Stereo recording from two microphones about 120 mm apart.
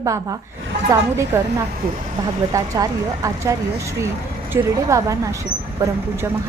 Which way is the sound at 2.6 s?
30° right (ahead or behind).